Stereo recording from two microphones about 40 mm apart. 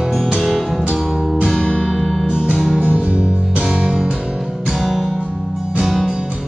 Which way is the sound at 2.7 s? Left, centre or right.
Right.